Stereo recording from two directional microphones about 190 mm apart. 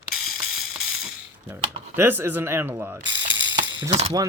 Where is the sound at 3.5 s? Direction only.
75° right (ahead or behind).